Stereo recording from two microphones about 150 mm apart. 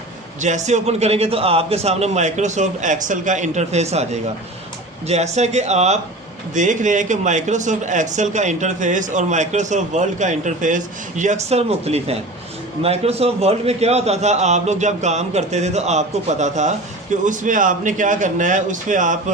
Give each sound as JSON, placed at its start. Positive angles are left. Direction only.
{"t": 0.3, "sound": "a man's voice", "side_deg": -50}